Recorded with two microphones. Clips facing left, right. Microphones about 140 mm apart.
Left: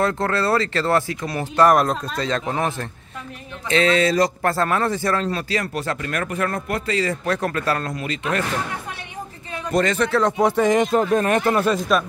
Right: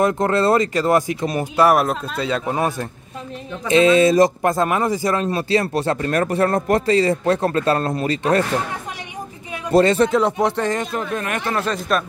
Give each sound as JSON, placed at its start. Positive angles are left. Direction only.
{"t": 0.0, "sound": "speech", "side_deg": -20}
{"t": 1.6, "sound": "speech", "side_deg": -5}
{"t": 9.7, "sound": "speech", "side_deg": -30}
{"t": 10.3, "sound": "speech", "side_deg": 5}
{"t": 10.9, "sound": "speech", "side_deg": 35}
{"t": 11.5, "sound": "speech", "side_deg": 10}